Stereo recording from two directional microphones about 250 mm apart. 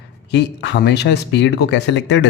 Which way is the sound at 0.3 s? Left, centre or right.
Left.